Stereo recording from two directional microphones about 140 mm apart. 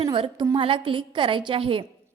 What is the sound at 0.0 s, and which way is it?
A woman's voice, 35° right (ahead or behind).